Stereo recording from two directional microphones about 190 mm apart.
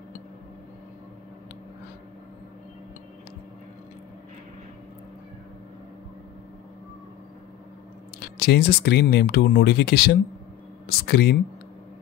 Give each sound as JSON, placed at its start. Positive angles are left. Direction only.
{"t": 8.2, "sound": "speech", "side_deg": 55}